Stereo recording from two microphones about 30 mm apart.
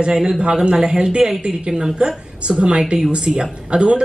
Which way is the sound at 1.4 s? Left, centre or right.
Centre.